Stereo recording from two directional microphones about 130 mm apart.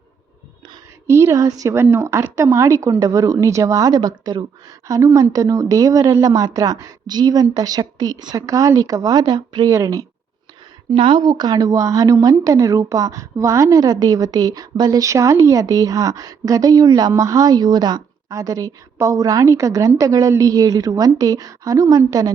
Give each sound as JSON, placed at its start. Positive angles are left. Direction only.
{"t": 1.0, "sound": "a woman's voice", "side_deg": -20}
{"t": 10.9, "sound": "a woman's voice", "side_deg": -40}